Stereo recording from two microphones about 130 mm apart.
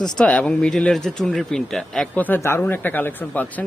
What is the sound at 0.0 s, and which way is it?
Speech, 10° left (ahead or behind).